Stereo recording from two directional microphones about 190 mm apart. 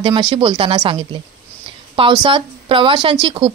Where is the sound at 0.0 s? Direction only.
25° right (ahead or behind).